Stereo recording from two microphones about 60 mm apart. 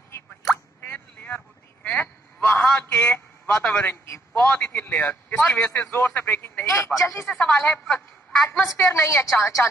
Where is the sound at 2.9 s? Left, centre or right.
Left.